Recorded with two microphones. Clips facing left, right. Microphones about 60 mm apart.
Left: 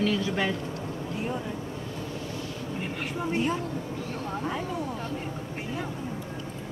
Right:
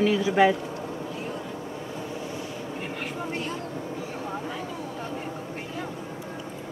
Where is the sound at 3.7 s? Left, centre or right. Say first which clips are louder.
Even; centre.